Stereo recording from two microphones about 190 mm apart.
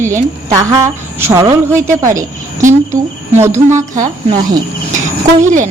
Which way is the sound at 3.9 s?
40° right (ahead or behind).